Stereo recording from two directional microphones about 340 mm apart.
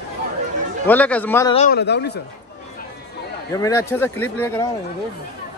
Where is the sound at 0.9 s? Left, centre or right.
Centre.